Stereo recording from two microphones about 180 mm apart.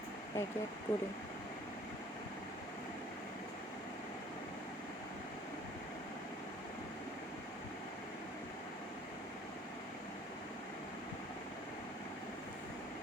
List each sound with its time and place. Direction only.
0.4 s speech: 15° left (ahead or behind)